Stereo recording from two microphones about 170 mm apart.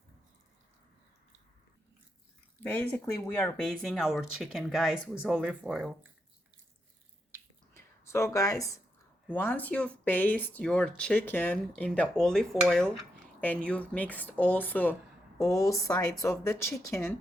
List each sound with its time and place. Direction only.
2.6 s speech: 10° left (ahead or behind); by 6.1 s 5° right (ahead or behind)
7.7 s a sound: 15° left (ahead or behind)
9.3 s speech: 10° left (ahead or behind)